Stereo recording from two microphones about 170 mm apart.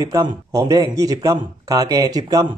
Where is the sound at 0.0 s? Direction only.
20° right (ahead or behind).